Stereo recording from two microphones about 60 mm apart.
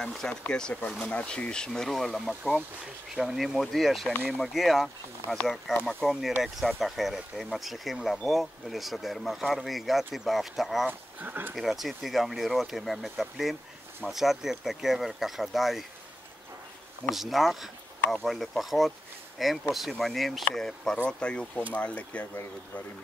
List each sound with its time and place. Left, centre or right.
0.0 s speech: centre
10.9 s speech: right
11.5 s speech: centre
17.1 s speech: centre; by 22.2 s left